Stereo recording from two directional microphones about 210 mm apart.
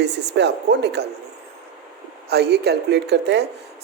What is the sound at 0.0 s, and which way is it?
Speech, 55° right (ahead or behind).